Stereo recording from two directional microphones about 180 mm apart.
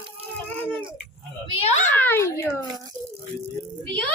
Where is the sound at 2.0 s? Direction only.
10° left (ahead or behind).